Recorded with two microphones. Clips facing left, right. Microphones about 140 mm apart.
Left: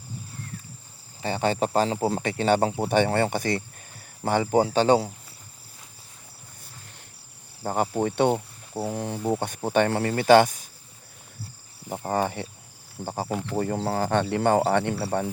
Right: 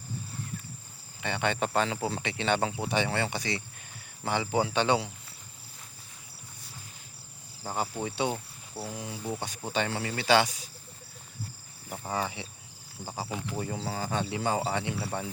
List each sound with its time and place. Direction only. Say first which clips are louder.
1.2 s speech: left 5 dB; 35° left (ahead or behind)
7.6 s speech: left 8 dB; 55° left (ahead or behind)
12.0 s speech: left 7 dB; 50° left (ahead or behind)